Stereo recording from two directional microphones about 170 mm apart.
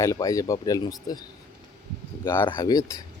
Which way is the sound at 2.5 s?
20° left (ahead or behind).